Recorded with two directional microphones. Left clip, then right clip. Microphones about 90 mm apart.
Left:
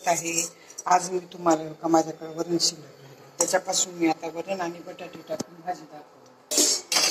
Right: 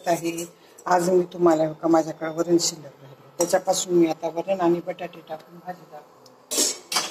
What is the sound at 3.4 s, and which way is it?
Speech, 35° right (ahead or behind).